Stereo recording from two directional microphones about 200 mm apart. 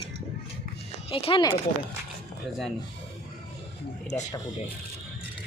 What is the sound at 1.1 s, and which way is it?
Speech, 25° left (ahead or behind).